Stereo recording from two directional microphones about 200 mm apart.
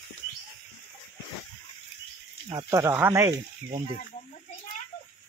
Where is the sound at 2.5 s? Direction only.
15° right (ahead or behind).